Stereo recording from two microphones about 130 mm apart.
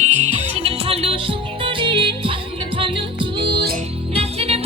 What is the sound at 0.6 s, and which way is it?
Music, 45° right (ahead or behind).